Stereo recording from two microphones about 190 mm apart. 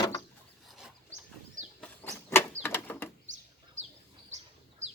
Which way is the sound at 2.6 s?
10° left (ahead or behind).